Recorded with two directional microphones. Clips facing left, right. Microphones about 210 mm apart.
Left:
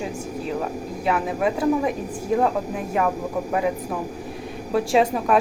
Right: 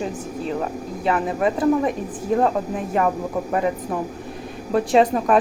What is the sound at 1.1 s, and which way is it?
Speech, centre (ahead or behind).